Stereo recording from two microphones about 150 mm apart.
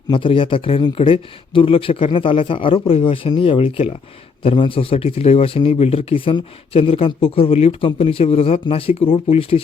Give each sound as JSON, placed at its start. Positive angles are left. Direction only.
{"t": 0.1, "sound": "speech", "side_deg": 35}